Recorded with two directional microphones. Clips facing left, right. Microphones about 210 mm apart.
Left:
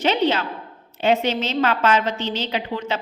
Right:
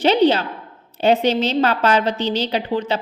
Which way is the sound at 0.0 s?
35° right (ahead or behind).